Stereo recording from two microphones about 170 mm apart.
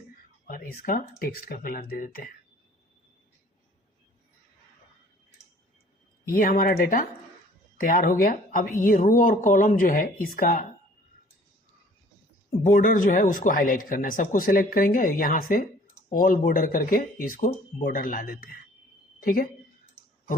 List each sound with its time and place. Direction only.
0.4 s speech: 55° left (ahead or behind)
6.2 s speech: 55° left (ahead or behind)
12.6 s speech: 50° left (ahead or behind)